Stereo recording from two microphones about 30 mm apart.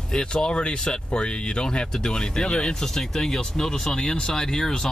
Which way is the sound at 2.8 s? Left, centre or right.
Centre.